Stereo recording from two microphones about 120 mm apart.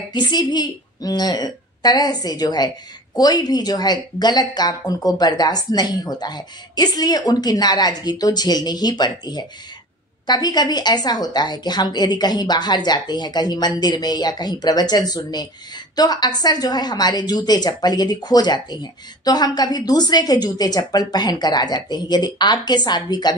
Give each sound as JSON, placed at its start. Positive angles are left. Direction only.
{"t": 0.1, "sound": "a woman's voice", "side_deg": 35}